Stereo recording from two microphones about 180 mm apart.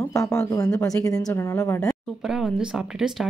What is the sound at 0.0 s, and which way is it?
A woman's voice, 15° left (ahead or behind).